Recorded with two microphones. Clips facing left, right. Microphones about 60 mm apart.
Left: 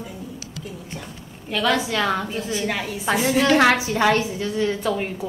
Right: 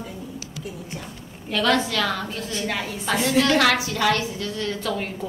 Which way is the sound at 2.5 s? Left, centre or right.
Centre.